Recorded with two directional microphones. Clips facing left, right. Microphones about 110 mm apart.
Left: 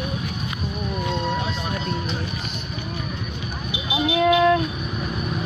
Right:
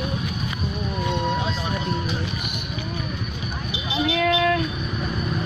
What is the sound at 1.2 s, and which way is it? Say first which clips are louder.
Vehicle: right 1 dB; 15° right (ahead or behind).